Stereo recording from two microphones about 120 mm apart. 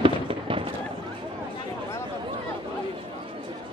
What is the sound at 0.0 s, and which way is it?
Fireworks, 50° right (ahead or behind).